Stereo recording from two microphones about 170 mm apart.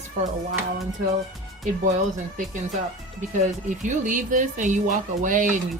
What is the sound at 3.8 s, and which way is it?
Speech, 50° right (ahead or behind).